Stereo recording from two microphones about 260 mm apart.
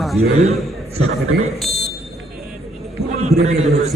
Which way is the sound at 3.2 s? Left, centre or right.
Right.